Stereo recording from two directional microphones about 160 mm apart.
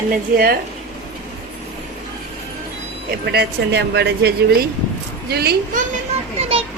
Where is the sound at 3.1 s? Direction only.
90° right.